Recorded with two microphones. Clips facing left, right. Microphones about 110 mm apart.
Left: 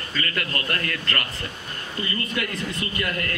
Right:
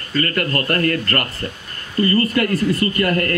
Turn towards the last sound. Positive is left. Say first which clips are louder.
# right 10 dB
turn(degrees=-50)  # may be behind; listen again after turning